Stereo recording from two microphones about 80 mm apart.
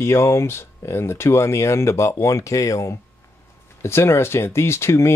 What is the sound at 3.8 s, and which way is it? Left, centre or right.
Speech, left.